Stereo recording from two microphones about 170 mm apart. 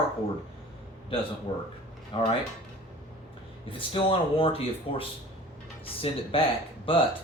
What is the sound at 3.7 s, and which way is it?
Speech, 30° left (ahead or behind).